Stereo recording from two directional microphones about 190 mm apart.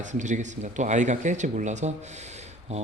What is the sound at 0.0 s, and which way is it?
Speech, 40° right (ahead or behind).